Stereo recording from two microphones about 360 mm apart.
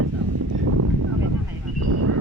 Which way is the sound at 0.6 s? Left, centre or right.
Right.